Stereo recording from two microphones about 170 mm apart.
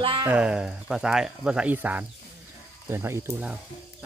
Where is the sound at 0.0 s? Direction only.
30° right (ahead or behind).